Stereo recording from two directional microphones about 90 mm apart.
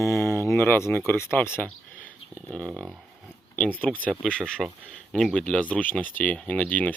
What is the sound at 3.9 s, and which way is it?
Speech, 5° left (ahead or behind).